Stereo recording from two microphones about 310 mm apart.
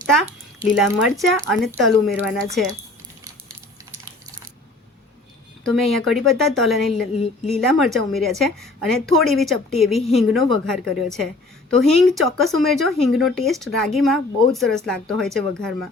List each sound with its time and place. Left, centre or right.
0.8 s speech: centre
5.6 s speech: centre